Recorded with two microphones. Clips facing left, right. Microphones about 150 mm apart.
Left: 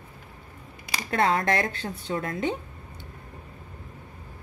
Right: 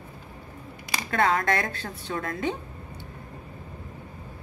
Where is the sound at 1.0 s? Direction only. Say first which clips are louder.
Even; 30° left (ahead or behind).